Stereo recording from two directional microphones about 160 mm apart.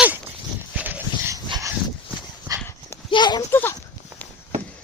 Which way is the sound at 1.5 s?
25° right (ahead or behind).